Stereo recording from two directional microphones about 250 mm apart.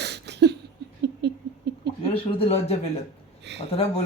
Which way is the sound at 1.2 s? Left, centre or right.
Right.